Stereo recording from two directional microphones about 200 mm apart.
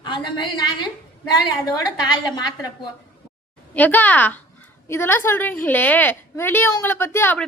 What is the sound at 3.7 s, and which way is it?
Speech, 10° left (ahead or behind).